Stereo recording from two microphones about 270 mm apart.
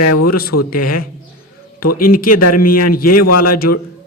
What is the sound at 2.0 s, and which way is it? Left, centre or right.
Speech, left.